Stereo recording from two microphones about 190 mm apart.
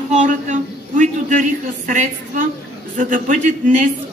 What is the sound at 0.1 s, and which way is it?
A woman's voice, 40° right (ahead or behind).